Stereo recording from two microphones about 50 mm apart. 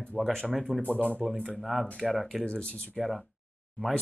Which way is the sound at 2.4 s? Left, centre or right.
Left.